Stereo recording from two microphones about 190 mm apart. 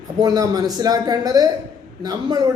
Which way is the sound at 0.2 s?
20° right (ahead or behind).